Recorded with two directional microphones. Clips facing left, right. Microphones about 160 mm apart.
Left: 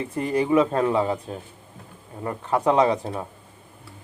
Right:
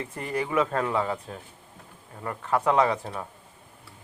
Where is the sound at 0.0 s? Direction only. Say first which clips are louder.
Left 6 dB; 20° left (ahead or behind).